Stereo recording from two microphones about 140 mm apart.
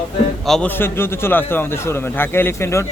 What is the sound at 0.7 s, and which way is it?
A man's voice, 15° left (ahead or behind).